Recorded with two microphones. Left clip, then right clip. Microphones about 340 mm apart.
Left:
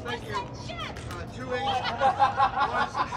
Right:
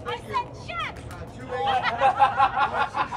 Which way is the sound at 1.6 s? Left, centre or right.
Right.